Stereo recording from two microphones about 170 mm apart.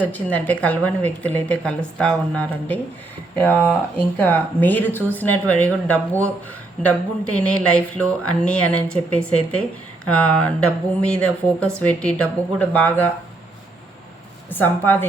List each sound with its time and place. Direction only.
0.0 s speech: 10° left (ahead or behind)
14.5 s speech: 10° left (ahead or behind)